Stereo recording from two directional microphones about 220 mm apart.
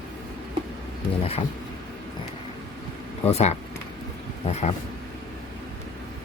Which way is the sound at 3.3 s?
30° left (ahead or behind).